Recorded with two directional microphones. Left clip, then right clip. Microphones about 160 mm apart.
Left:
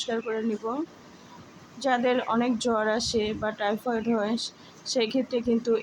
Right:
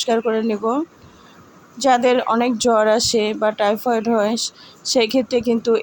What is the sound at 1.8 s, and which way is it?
Speech, 35° right (ahead or behind).